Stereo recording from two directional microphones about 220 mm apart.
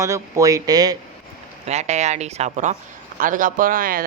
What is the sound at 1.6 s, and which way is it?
Speech, 30° right (ahead or behind).